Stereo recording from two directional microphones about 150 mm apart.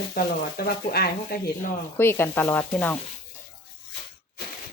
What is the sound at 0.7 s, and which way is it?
Speech, 90° left.